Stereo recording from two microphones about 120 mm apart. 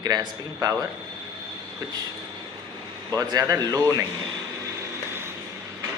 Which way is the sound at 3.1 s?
30° right (ahead or behind).